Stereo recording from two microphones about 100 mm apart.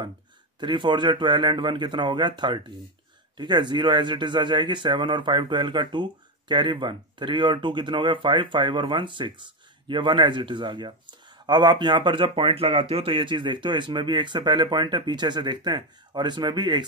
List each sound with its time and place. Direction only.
0.6 s speech: 50° right (ahead or behind)